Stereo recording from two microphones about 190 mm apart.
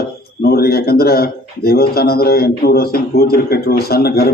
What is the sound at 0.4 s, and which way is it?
A man's voice, 55° left (ahead or behind).